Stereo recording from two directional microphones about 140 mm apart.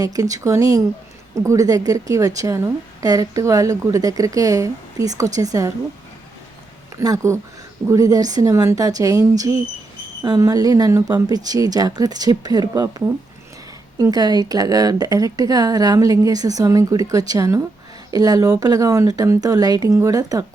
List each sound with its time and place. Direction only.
0.0 s speech: 25° right (ahead or behind)
6.9 s speech: 25° right (ahead or behind)
14.0 s speech: 30° right (ahead or behind)